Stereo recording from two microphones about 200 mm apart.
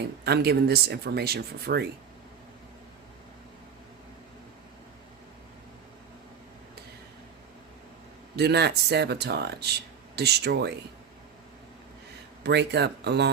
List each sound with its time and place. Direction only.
0.3 s speech: 55° right (ahead or behind)
8.4 s speech: 55° right (ahead or behind)
12.4 s speech: 55° right (ahead or behind)